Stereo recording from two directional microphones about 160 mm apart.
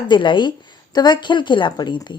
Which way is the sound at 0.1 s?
30° left (ahead or behind).